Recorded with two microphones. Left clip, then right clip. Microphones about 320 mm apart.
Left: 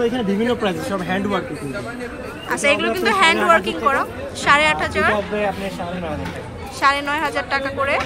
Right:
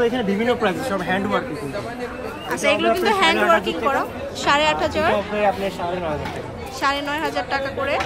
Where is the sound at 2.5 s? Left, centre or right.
Centre.